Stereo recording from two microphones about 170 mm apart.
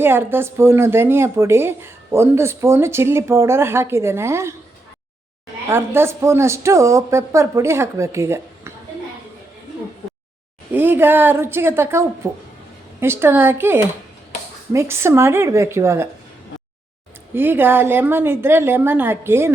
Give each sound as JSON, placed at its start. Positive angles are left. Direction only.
{"t": 0.0, "sound": "speech", "side_deg": -15}
{"t": 5.6, "sound": "speech", "side_deg": -15}
{"t": 10.7, "sound": "speech", "side_deg": -10}
{"t": 17.3, "sound": "speech", "side_deg": -10}